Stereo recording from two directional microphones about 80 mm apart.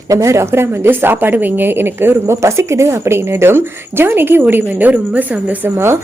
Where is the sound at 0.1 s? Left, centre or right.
Right; by 5.7 s centre.